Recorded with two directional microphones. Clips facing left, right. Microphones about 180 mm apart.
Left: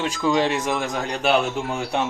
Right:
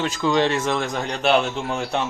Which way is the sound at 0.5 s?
15° left (ahead or behind).